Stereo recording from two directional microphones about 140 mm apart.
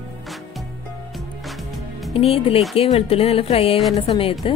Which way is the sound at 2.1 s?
45° left (ahead or behind).